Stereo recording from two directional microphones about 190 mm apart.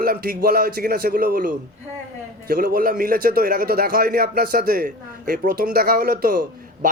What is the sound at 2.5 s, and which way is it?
A man's voice, 50° right (ahead or behind).